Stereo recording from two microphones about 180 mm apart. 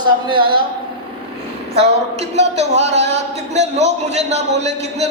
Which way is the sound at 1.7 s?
35° right (ahead or behind).